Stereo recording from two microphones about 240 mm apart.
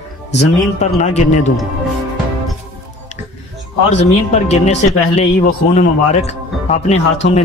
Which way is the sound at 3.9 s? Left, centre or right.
Left.